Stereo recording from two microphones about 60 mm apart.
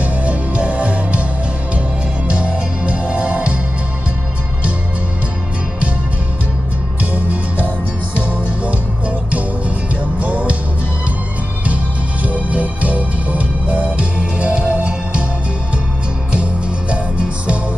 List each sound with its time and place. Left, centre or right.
0.0 s music: right
2.2 s music: centre
7.0 s music: right
10.1 s music: right
11.6 s music: right
16.9 s music: centre